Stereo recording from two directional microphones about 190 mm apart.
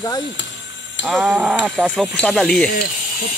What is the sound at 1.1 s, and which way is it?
Speech, 5° right (ahead or behind).